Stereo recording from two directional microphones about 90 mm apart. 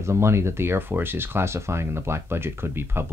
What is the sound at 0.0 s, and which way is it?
Speech, 30° right (ahead or behind).